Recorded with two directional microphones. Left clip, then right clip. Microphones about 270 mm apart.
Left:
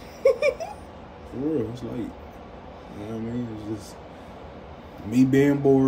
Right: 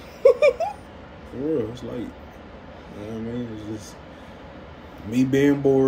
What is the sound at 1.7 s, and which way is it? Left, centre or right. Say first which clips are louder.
Speech: right 1 dB; centre.